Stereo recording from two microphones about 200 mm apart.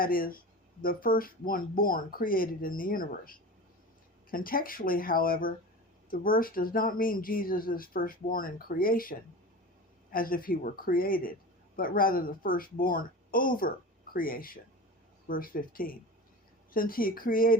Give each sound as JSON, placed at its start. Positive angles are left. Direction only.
{"t": 0.0, "sound": "speech", "side_deg": 45}